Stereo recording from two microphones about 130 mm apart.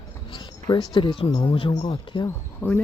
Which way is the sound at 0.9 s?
40° left (ahead or behind).